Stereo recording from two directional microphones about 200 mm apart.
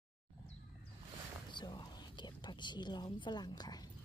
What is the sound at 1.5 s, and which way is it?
Whispering, 20° left (ahead or behind).